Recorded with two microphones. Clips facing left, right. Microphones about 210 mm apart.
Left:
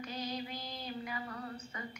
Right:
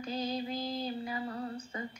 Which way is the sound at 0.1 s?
30° right (ahead or behind).